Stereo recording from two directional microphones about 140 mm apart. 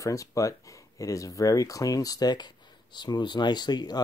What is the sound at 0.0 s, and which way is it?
Speech, 25° left (ahead or behind).